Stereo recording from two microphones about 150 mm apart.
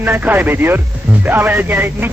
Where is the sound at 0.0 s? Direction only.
10° right (ahead or behind).